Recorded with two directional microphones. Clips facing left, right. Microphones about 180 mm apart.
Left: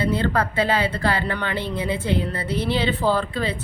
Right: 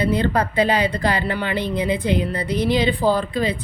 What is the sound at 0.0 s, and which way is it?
A woman's voice, 15° right (ahead or behind).